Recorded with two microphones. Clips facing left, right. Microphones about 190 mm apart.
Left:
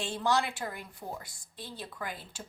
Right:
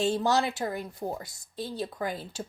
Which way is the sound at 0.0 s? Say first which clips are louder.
Right 5 dB; 40° right (ahead or behind).